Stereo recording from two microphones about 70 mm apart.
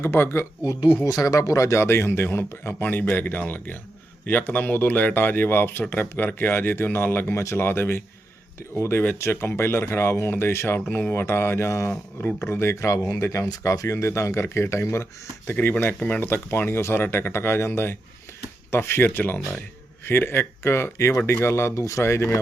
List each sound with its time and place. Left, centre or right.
0.0 s speech: left
0.6 s speech: left
1.0 s speech: left
7.3 s speech: left
10.8 s speech: left
15.4 s speech: left
16.0 s speech: centre
16.2 s speech: left